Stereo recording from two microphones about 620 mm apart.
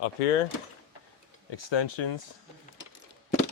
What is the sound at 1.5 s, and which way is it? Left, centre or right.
Speech, left.